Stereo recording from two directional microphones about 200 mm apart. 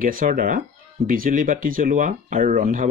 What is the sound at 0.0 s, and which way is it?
Speech, 45° right (ahead or behind).